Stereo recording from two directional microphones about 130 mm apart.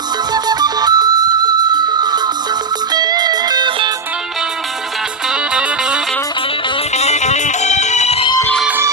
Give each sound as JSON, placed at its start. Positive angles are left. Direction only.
{"t": 0.3, "sound": "music", "side_deg": -30}
{"t": 5.3, "sound": "music", "side_deg": -5}
{"t": 6.9, "sound": "music", "side_deg": 60}
{"t": 8.6, "sound": "music", "side_deg": -15}